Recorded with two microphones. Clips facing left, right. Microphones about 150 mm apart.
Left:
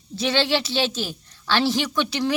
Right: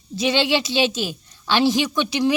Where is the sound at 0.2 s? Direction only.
15° right (ahead or behind).